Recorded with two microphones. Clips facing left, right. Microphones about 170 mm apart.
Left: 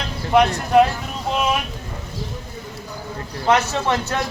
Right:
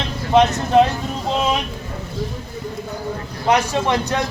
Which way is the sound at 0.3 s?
25° right (ahead or behind).